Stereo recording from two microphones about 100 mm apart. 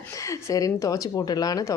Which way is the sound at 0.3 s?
35° left (ahead or behind).